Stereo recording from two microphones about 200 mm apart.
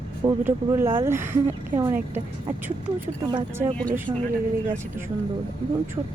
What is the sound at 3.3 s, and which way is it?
Speech, 20° right (ahead or behind).